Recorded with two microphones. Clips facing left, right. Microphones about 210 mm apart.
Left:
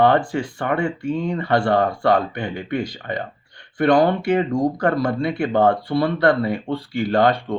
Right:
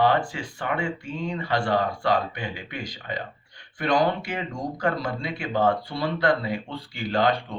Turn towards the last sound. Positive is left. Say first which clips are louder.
# left 6 dB
turn(degrees=55)  # may be behind; listen again after turning